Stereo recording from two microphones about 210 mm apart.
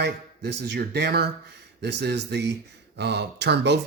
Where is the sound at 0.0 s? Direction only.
55° right (ahead or behind).